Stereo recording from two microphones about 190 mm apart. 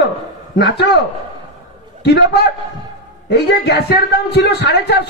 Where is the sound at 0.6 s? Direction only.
60° left (ahead or behind).